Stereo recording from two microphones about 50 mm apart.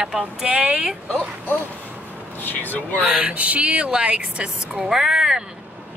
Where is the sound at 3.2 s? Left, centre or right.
Right.